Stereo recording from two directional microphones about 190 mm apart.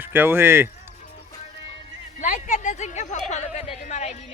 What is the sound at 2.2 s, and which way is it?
A woman's voice, 45° left (ahead or behind).